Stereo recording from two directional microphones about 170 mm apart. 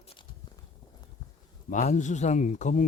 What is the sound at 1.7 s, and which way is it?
Speech, 45° left (ahead or behind).